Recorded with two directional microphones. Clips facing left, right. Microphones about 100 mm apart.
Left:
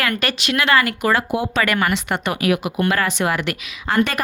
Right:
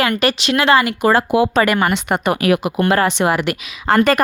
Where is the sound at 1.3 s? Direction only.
90° right.